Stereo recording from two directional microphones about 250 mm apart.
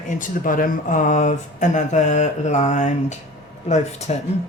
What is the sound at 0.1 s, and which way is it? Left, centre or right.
Speech, left.